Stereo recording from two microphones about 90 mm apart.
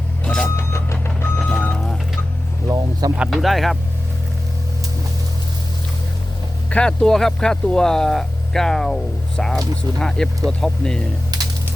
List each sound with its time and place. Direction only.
0.3 s music: 10° left (ahead or behind)
0.5 s vehicle: 30° left (ahead or behind)
2.6 s a sound: 40° right (ahead or behind)
3.2 s speech: centre (ahead or behind)
6.7 s speech: 10° left (ahead or behind)